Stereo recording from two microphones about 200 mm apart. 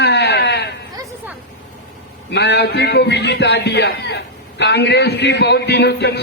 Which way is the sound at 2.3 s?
60° left (ahead or behind).